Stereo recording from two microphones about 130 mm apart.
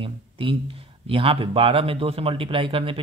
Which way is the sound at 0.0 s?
40° right (ahead or behind).